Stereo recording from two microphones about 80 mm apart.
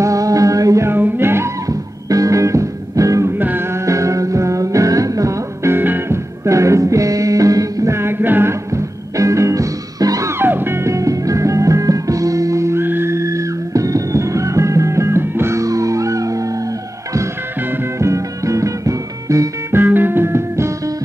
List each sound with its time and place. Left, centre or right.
0.0 s music: right
0.8 s music: right
3.3 s music: right
3.8 s music: right
8.0 s music: right
10.4 s music: right
17.9 s music: right
19.7 s music: right